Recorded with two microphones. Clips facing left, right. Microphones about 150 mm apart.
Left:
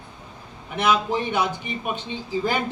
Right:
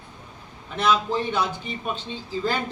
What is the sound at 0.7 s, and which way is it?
A man's voice, 15° left (ahead or behind).